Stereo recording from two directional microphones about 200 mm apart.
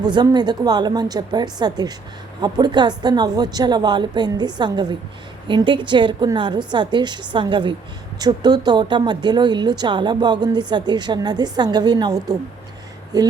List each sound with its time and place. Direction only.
0.0 s speech: 20° right (ahead or behind)